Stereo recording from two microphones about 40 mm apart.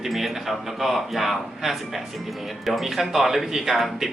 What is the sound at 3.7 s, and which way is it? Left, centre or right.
Speech, centre.